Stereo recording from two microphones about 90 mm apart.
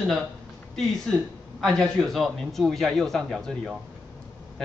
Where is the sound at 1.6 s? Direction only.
5° left (ahead or behind).